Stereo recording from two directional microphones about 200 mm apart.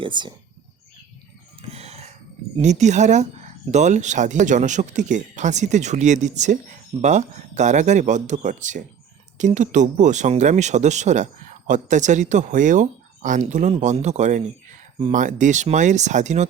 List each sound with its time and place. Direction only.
0.0 s speech: 25° right (ahead or behind)
1.7 s music: 30° right (ahead or behind)
2.6 s speech: 35° right (ahead or behind)